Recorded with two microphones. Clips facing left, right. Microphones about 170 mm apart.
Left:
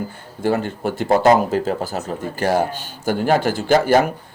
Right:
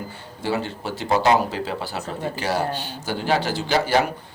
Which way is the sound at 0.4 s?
50° left (ahead or behind).